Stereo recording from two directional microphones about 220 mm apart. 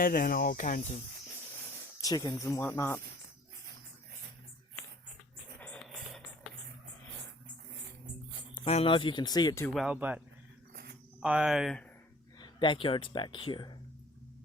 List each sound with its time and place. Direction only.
0.0 s speech: 40° left (ahead or behind)
2.0 s speech: 15° left (ahead or behind)
5.5 s music: 5° left (ahead or behind)
8.5 s speech: 25° left (ahead or behind)
9.6 s speech: centre (ahead or behind)
10.7 s cricket: 45° right (ahead or behind)
11.2 s speech: 5° right (ahead or behind)
12.4 s speech: 20° left (ahead or behind)